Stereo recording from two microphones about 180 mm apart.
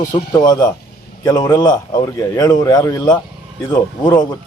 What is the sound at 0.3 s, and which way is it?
A man's voice, 20° left (ahead or behind).